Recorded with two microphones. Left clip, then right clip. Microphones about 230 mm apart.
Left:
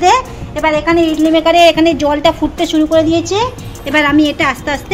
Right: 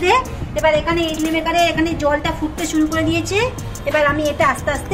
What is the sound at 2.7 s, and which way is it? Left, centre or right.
Speech, centre.